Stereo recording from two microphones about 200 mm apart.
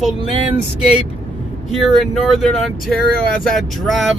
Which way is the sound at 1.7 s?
Centre (ahead or behind).